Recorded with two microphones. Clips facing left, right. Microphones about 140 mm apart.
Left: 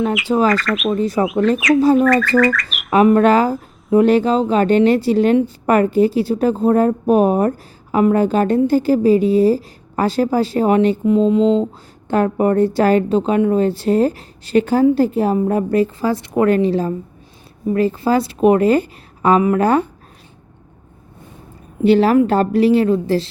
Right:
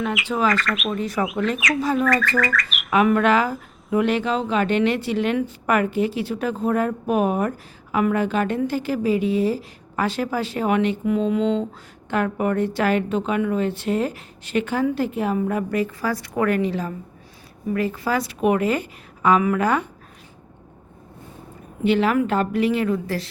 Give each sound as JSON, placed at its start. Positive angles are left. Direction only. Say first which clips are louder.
{"t": 0.1, "sound": "squawk", "louder": "left 6 dB", "side_deg": 0}
{"t": 2.9, "sound": "a woman's voice", "louder": "left 6 dB", "side_deg": 35}
{"t": 21.8, "sound": "a woman's voice", "louder": "left 7 dB", "side_deg": 35}